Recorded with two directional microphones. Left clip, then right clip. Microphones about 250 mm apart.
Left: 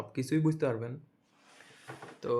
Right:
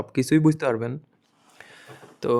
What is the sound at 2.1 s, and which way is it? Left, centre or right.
Speech, right.